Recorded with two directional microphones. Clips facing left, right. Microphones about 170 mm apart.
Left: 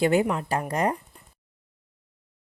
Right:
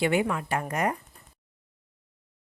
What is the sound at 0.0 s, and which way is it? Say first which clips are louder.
Speech: left 3 dB; 40° left (ahead or behind).